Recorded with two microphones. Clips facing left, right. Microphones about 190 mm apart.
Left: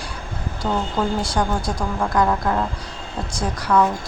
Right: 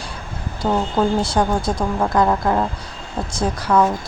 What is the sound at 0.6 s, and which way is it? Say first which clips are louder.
Speech: right 4 dB; 40° right (ahead or behind).